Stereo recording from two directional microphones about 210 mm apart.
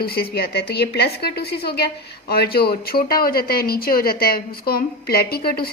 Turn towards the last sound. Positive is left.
turn(degrees=45)  # may be behind; listen again after turning